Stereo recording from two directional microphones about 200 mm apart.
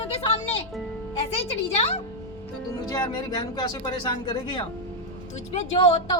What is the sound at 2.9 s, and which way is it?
A child's voice, 20° left (ahead or behind).